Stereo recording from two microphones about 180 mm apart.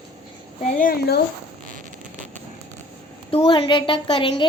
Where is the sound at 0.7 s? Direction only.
55° left (ahead or behind).